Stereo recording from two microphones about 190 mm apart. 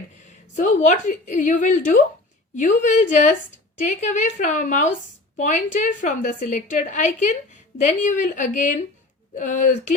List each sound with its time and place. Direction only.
0.5 s a woman's voice: 40° left (ahead or behind)